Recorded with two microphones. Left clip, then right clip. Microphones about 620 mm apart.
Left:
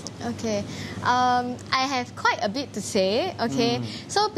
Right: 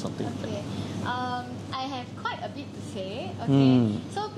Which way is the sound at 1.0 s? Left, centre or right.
Left.